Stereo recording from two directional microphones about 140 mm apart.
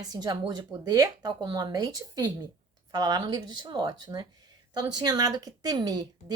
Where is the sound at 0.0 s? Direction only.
25° right (ahead or behind).